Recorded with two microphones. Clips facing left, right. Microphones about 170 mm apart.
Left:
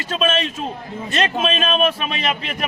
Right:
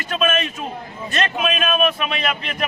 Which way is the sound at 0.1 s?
25° left (ahead or behind).